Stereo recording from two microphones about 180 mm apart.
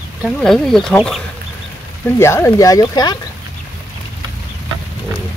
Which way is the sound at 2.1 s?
15° left (ahead or behind).